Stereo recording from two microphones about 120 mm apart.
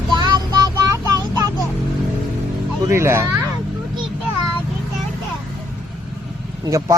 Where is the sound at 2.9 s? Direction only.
20° right (ahead or behind).